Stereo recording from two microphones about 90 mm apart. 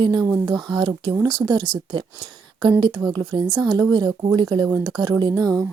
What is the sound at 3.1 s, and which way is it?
Speech, 55° right (ahead or behind).